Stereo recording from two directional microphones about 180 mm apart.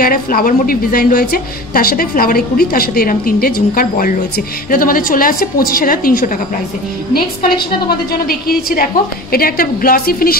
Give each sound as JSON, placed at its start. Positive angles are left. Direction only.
{"t": 0.0, "sound": "a woman's voice", "side_deg": 55}